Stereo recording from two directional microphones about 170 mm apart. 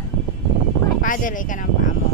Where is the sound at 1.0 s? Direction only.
50° left (ahead or behind).